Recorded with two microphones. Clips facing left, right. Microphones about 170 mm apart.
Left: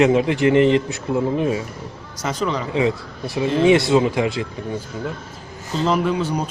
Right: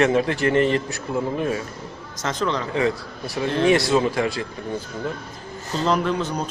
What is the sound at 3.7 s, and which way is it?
Speech, 20° left (ahead or behind).